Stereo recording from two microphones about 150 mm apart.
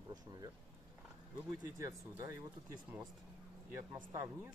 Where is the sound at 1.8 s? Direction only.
20° right (ahead or behind).